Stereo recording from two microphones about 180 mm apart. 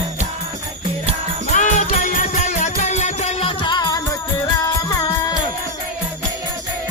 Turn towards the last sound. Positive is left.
turn(degrees=20)  # may be behind; listen again after turning